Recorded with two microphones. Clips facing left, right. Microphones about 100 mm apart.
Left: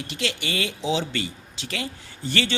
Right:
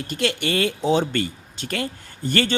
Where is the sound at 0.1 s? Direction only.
50° right (ahead or behind).